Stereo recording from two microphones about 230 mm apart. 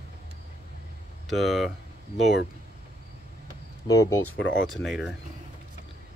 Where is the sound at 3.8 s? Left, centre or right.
Centre.